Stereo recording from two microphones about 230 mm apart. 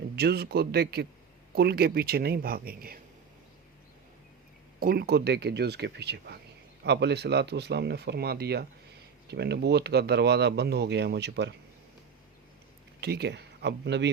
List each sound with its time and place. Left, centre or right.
0.2 s speech: right
4.8 s speech: right
13.0 s speech: right